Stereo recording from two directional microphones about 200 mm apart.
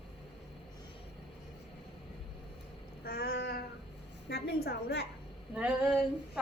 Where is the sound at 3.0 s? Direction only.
50° left (ahead or behind).